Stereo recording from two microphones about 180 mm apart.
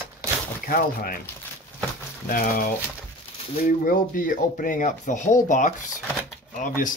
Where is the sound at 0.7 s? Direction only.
55° left (ahead or behind).